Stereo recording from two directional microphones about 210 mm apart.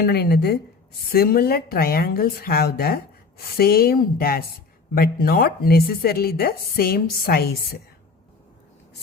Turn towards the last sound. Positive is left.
turn(degrees=45)  # may be behind; listen again after turning